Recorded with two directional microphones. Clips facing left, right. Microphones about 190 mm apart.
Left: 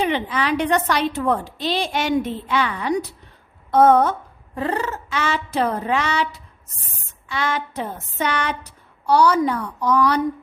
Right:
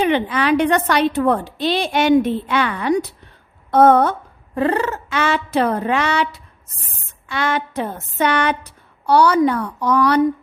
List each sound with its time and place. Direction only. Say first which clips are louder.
0.0 s a woman's voice: right 4 dB; 60° right (ahead or behind)
7.3 s a woman's voice: right 3 dB; 60° right (ahead or behind)